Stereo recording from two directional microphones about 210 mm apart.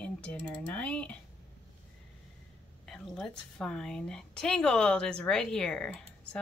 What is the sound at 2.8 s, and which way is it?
A woman's voice, centre (ahead or behind).